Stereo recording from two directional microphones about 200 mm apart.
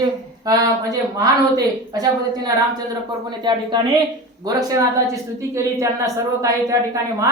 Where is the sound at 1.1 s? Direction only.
20° right (ahead or behind).